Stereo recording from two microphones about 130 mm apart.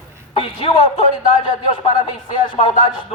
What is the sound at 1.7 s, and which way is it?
A man's voice, 40° left (ahead or behind).